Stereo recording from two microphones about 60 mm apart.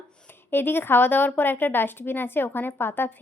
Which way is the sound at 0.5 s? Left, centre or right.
Left.